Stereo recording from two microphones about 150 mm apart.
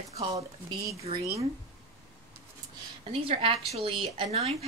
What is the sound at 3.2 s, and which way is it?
Speech, 40° right (ahead or behind).